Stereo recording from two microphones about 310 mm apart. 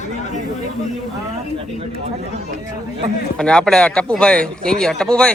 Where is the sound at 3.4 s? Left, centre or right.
Centre.